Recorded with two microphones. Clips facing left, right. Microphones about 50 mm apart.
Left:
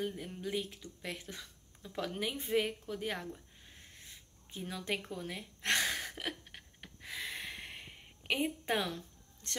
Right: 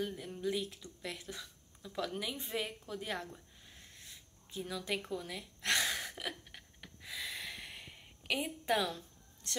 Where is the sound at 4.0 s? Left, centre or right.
Left.